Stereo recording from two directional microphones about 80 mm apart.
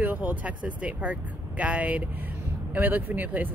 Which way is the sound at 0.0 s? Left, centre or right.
Right.